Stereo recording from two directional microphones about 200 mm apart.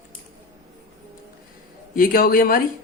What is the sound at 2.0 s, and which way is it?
Speech, 45° left (ahead or behind).